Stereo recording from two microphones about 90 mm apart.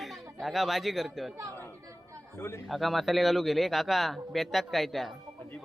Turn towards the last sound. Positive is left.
turn(degrees=0)  # may be behind; listen again after turning